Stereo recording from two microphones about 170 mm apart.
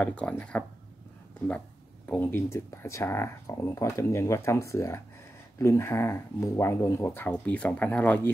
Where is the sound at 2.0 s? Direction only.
10° left (ahead or behind).